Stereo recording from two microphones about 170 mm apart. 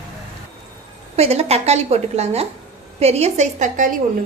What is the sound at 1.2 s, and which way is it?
A woman's voice, 40° right (ahead or behind).